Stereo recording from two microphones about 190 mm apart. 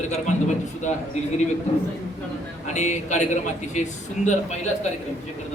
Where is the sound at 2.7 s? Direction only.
40° left (ahead or behind).